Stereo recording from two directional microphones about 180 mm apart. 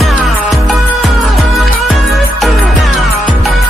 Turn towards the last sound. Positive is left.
turn(degrees=0)  # may be behind; listen again after turning